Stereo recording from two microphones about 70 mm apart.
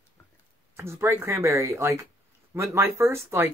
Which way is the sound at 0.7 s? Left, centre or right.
Right.